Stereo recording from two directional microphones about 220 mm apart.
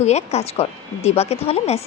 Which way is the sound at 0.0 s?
30° left (ahead or behind).